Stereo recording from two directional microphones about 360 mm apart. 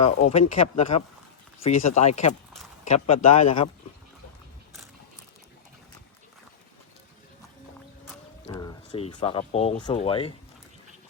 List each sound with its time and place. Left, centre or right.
0.2 s speech: centre
3.4 s speech: left
8.4 s speech: centre